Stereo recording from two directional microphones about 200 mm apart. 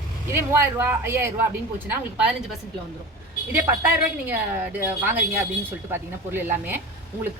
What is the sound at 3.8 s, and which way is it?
Speech, 10° right (ahead or behind).